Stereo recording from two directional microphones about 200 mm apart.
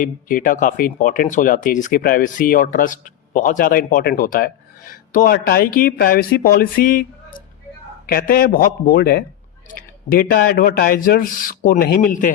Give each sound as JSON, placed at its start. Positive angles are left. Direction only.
{"t": 0.0, "sound": "speech", "side_deg": 45}
{"t": 8.1, "sound": "speech", "side_deg": 45}
{"t": 10.5, "sound": "speech", "side_deg": 45}